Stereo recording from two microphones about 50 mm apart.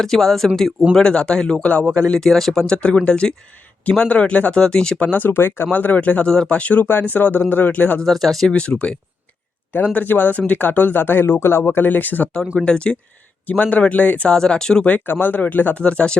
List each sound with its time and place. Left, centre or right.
0.0 s speech: centre
0.9 s speech: centre
4.6 s speech: centre
5.1 s speech: left
5.7 s speech: left
6.2 s speech: centre; by 7.9 s left
8.0 s speech: centre
8.4 s speech: left
9.7 s speech: left
12.6 s speech: left
13.5 s speech: left
14.3 s speech: centre
15.0 s speech: left
15.8 s speech: left